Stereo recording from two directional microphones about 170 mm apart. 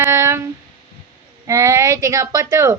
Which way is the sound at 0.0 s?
15° right (ahead or behind).